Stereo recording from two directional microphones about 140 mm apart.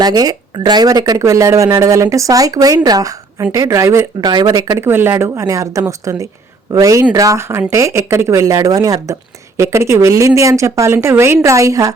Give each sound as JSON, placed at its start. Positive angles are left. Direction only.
{"t": 0.0, "sound": "speech", "side_deg": -30}